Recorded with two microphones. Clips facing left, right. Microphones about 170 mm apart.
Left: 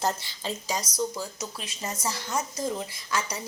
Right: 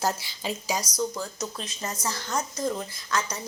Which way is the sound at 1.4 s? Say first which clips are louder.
Right 3 dB; 10° left (ahead or behind).